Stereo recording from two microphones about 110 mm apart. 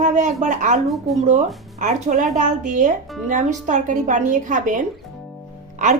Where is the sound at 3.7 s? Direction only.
90° right.